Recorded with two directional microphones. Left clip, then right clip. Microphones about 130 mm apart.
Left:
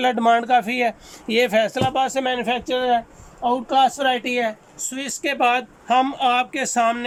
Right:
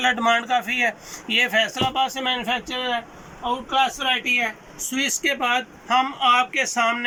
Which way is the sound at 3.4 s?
45° left (ahead or behind).